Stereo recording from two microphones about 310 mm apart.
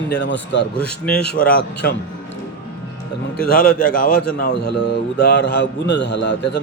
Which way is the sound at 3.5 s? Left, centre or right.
Left.